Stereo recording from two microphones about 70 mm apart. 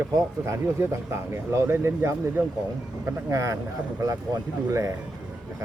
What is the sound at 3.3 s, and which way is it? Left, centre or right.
Speech, right.